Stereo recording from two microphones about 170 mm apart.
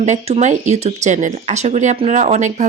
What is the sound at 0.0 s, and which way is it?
Speech, 40° right (ahead or behind).